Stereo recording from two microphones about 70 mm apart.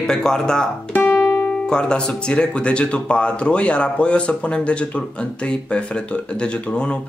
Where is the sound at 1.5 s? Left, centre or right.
Centre.